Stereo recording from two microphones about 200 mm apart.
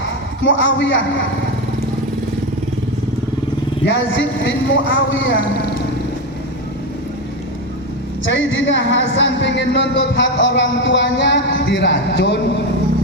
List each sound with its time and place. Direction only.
0.0 s a man's voice: 70° left (ahead or behind)
3.8 s a man's voice: 65° left (ahead or behind)
8.2 s a woman's voice: 65° left (ahead or behind)